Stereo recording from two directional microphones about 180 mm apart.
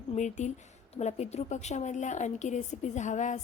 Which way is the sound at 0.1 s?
40° left (ahead or behind).